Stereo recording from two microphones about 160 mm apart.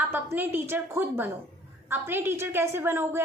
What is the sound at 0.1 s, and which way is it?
A woman's voice, 15° right (ahead or behind).